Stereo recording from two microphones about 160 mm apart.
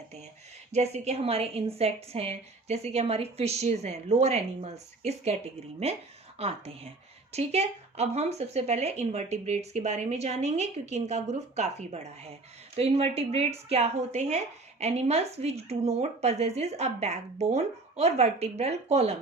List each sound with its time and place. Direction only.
0.7 s speech: 45° right (ahead or behind)
6.4 s speech: 40° right (ahead or behind)